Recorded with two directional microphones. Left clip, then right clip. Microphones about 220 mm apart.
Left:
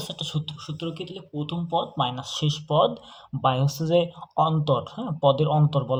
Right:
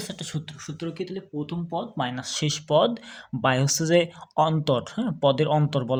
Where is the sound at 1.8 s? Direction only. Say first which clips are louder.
Left 4 dB; 50° right (ahead or behind); by 3.6 s 75° right (ahead or behind).